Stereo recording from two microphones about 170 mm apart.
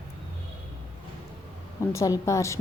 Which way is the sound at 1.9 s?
20° left (ahead or behind).